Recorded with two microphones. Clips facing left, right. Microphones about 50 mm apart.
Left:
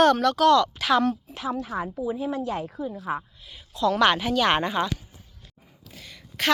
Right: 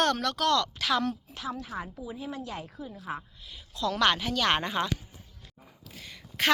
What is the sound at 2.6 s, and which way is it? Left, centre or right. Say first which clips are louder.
Speech: left 9 dB; left.